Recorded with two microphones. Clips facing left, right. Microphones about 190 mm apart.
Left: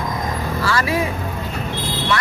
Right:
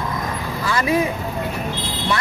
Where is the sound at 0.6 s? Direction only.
20° right (ahead or behind).